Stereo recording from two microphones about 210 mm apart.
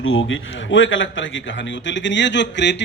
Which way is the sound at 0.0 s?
70° left (ahead or behind).